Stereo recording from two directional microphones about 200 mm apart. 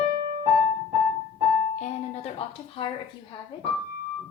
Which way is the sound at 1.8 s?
30° left (ahead or behind).